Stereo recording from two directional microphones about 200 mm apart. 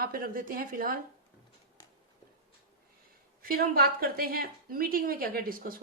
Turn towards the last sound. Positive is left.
turn(degrees=-45)  # may be behind; listen again after turning